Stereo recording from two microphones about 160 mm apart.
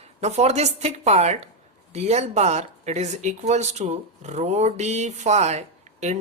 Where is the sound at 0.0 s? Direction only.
45° right (ahead or behind).